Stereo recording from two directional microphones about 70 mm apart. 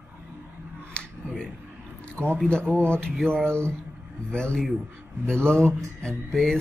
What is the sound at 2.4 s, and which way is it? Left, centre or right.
Speech, centre.